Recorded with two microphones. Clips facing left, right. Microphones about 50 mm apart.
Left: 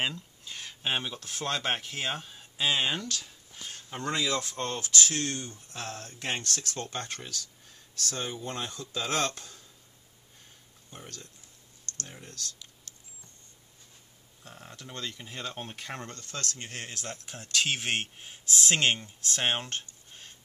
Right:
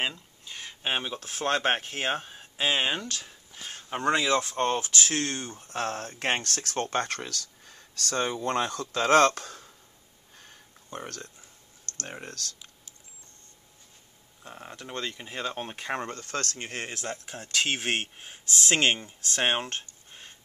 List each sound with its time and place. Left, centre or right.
0.0 s speech: centre
1.4 s speech: right; by 3.1 s centre
3.1 s speech: right
10.3 s a sound: right
12.0 s speech: right
12.9 s camera: centre
14.4 s speech: right
17.1 s speech: right
18.7 s speech: right
19.4 s a sound: right